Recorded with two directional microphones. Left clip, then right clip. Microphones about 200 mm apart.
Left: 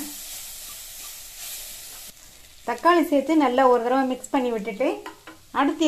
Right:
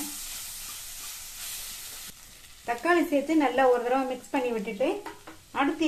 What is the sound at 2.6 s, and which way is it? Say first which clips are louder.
Speech: left 6 dB; 35° left (ahead or behind).